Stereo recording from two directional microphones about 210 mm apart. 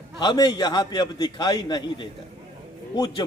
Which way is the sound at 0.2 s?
20° left (ahead or behind).